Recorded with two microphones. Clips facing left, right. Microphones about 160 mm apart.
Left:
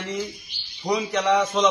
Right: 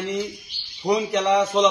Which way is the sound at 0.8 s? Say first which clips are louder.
Right 3 dB; 30° right (ahead or behind).